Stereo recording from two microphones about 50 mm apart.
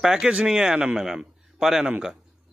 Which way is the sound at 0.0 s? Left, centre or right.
Centre.